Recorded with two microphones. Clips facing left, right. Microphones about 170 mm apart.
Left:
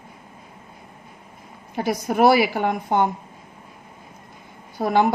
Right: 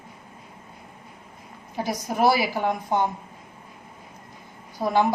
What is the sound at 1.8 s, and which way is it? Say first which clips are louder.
A woman's voice: left 4 dB; 60° left (ahead or behind).